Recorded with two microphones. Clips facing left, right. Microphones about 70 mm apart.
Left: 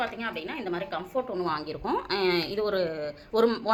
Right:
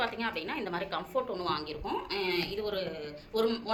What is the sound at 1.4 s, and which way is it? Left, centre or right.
Speech, left.